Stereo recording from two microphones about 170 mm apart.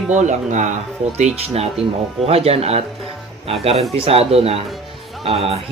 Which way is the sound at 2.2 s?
35° right (ahead or behind).